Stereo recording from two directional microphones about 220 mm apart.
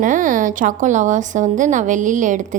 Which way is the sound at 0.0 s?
35° right (ahead or behind).